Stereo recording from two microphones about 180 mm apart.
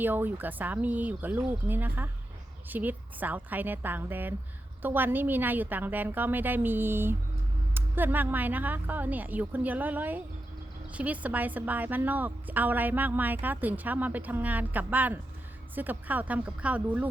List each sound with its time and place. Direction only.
0.0 s a woman's voice: 10° right (ahead or behind)